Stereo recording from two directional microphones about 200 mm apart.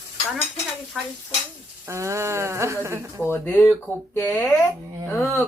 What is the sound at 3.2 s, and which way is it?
A woman's voice, 10° left (ahead or behind).